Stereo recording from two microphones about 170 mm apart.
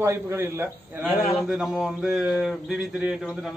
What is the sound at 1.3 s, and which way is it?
Speech, centre (ahead or behind).